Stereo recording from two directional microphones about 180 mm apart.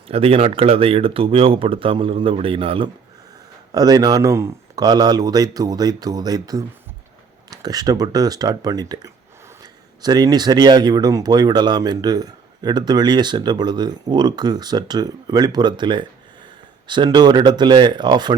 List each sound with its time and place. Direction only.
0.1 s speech: 35° right (ahead or behind)